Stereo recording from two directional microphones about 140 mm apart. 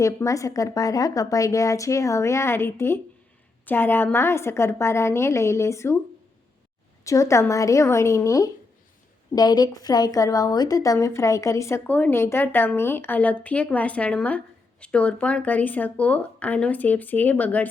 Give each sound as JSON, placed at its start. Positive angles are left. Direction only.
{"t": 0.0, "sound": "a woman's voice", "side_deg": 20}
{"t": 7.0, "sound": "a woman's voice", "side_deg": 20}